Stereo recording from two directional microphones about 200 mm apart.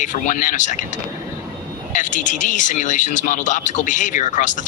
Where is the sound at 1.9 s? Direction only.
40° left (ahead or behind).